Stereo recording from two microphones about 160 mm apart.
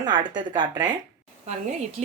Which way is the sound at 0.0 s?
25° right (ahead or behind).